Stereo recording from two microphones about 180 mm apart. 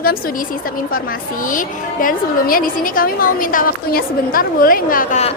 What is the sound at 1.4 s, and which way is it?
A woman's voice, 50° left (ahead or behind).